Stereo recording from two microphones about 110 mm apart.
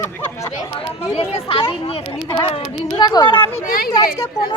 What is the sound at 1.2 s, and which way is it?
Speech, 60° left (ahead or behind).